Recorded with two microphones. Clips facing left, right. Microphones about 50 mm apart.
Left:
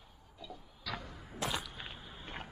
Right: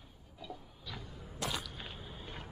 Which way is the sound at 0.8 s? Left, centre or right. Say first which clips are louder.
Left 5 dB; left.